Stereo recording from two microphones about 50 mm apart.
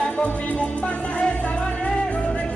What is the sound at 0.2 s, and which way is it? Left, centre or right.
Music, left.